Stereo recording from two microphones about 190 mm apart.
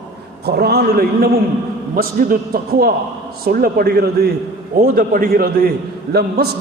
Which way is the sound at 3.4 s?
50° right (ahead or behind).